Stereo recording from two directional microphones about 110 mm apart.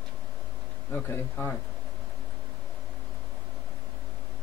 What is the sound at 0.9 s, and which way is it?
Speech, 20° left (ahead or behind).